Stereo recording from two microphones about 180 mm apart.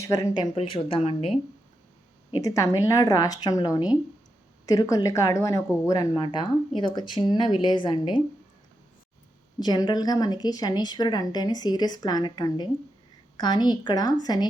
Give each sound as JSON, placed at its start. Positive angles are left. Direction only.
{"t": 0.0, "sound": "speech", "side_deg": 20}
{"t": 2.3, "sound": "speech", "side_deg": 20}
{"t": 9.6, "sound": "speech", "side_deg": 25}